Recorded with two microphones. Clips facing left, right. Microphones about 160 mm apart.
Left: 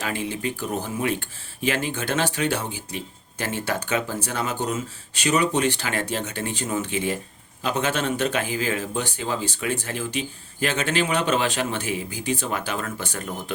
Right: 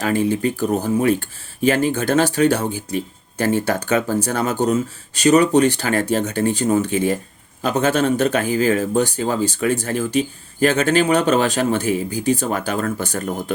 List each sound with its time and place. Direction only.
0.0 s speech: 40° right (ahead or behind)